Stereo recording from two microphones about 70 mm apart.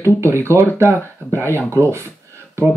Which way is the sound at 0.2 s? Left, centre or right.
Right.